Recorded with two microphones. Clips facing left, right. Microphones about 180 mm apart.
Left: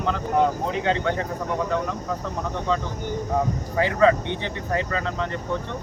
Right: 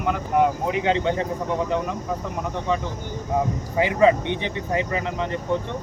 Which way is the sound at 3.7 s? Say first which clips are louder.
Right 1 dB; 15° right (ahead or behind).